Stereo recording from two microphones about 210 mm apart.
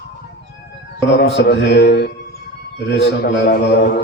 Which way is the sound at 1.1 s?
55° left (ahead or behind).